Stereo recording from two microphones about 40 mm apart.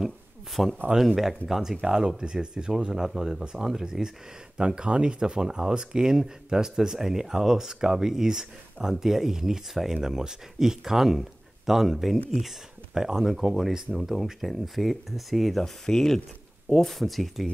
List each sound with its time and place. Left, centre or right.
0.6 s speech: centre
1.9 s speech: centre
4.6 s speech: right; by 17.5 s centre